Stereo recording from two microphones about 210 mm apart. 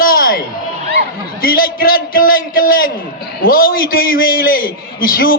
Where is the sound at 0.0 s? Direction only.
45° left (ahead or behind).